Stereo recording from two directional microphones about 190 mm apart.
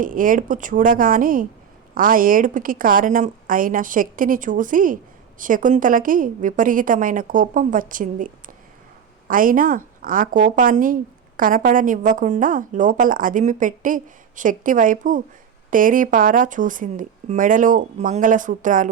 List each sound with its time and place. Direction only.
0.0 s a woman's voice: 45° right (ahead or behind)